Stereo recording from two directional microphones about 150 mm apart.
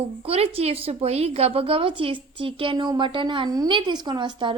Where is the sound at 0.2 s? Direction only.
40° right (ahead or behind).